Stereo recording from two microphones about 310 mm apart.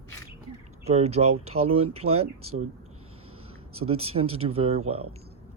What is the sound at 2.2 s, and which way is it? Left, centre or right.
Speech, right.